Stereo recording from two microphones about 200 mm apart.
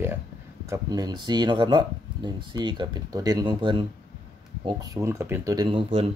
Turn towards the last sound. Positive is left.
turn(degrees=-25)  # may be behind; listen again after turning